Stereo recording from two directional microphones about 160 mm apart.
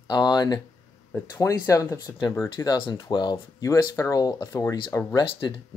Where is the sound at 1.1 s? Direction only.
15° left (ahead or behind).